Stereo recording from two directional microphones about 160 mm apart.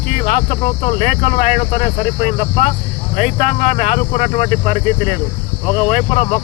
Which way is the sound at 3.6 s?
45° left (ahead or behind).